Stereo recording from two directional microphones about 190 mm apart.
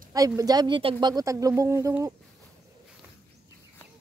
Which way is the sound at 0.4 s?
20° right (ahead or behind).